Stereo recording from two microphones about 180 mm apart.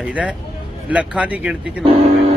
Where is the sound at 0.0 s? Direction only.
5° right (ahead or behind).